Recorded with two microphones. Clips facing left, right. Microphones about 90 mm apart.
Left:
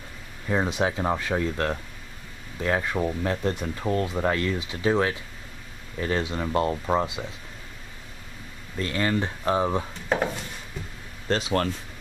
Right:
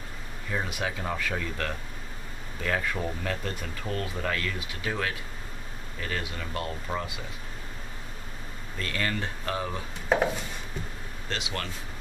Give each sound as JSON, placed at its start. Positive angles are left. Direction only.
{"t": 0.5, "sound": "speech", "side_deg": 25}
{"t": 8.7, "sound": "speech", "side_deg": 20}
{"t": 10.0, "sound": "speech", "side_deg": 0}
{"t": 11.2, "sound": "speech", "side_deg": 40}